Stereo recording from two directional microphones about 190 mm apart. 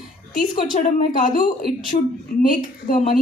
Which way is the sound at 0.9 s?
45° left (ahead or behind).